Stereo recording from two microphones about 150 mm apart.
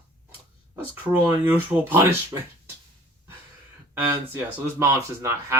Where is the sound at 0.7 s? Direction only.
15° right (ahead or behind).